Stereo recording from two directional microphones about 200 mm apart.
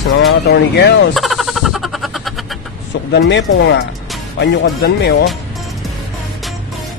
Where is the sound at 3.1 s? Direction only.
60° left (ahead or behind).